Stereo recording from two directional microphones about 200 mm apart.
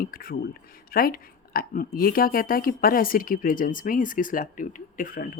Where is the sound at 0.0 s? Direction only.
45° left (ahead or behind).